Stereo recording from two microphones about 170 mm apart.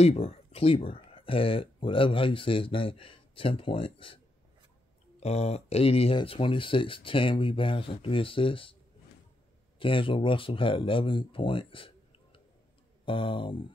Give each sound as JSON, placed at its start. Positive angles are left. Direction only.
{"t": 0.0, "sound": "speech", "side_deg": 35}
{"t": 5.2, "sound": "speech", "side_deg": 40}
{"t": 9.8, "sound": "speech", "side_deg": 30}